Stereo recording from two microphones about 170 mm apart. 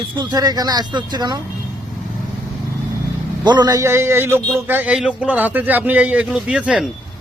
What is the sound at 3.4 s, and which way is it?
A man's voice, 25° right (ahead or behind).